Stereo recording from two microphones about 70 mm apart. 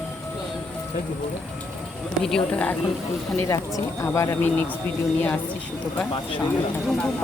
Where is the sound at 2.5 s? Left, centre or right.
Centre.